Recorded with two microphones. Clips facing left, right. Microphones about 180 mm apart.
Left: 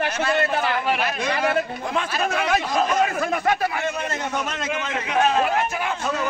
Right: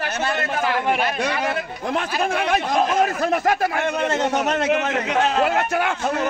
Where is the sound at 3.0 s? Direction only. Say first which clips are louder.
Right 2 dB; 45° right (ahead or behind).